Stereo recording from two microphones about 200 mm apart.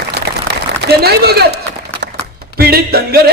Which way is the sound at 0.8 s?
50° right (ahead or behind).